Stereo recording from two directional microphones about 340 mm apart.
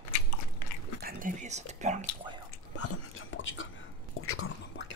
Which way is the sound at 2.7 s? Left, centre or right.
Left.